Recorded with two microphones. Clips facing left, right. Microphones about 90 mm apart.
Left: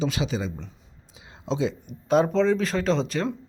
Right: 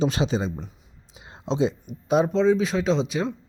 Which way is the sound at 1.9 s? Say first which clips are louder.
Left 4 dB; 5° right (ahead or behind).